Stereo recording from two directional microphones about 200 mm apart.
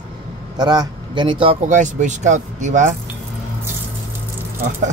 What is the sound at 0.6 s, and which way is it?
Speech, 20° right (ahead or behind).